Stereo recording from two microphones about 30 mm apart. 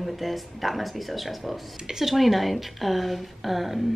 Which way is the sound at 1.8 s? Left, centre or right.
Right.